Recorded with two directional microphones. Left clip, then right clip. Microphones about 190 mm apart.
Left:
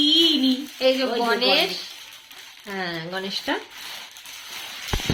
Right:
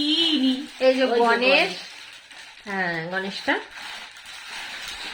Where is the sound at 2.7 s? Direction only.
15° right (ahead or behind).